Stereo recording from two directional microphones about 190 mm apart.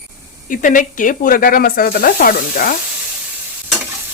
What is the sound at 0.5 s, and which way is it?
Speech, 45° left (ahead or behind).